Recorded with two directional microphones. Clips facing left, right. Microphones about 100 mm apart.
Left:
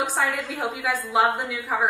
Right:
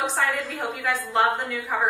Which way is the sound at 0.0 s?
5° left (ahead or behind).